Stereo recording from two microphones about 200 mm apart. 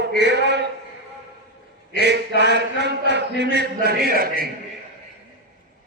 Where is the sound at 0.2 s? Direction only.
60° right (ahead or behind).